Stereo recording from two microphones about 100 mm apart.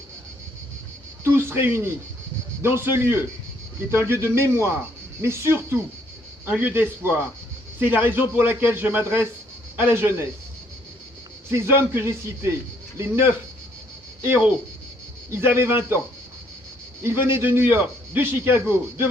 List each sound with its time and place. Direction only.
1.2 s a sound: 25° right (ahead or behind)
2.6 s a man's voice: 25° right (ahead or behind)
11.5 s a man's voice: 25° right (ahead or behind)
17.0 s a man's voice: 25° right (ahead or behind)